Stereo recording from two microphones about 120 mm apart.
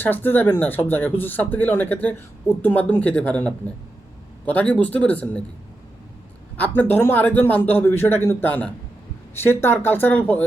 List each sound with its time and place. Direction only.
0.0 s speech: 15° left (ahead or behind)
6.6 s speech: 15° left (ahead or behind)